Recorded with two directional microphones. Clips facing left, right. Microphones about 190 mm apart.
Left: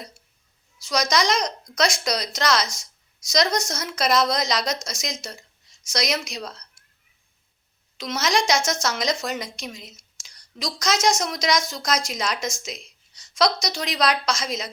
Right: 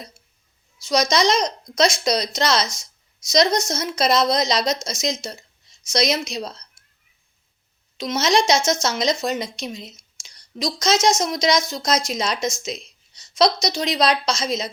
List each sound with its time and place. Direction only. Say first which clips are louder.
0.8 s speech: right 4 dB; 20° right (ahead or behind)
7.9 s a woman's voice: right 4 dB; 25° right (ahead or behind)